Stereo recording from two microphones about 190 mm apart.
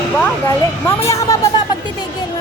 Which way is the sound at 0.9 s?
15° left (ahead or behind).